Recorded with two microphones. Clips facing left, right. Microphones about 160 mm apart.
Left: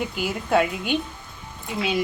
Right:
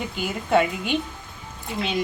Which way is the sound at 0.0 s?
Centre (ahead or behind).